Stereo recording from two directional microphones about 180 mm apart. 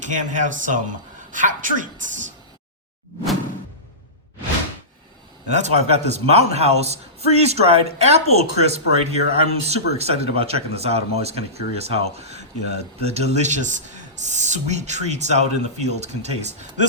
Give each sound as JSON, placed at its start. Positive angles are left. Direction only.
{"t": 0.0, "sound": "a woman's voice", "side_deg": -45}
{"t": 5.5, "sound": "a man's voice", "side_deg": -40}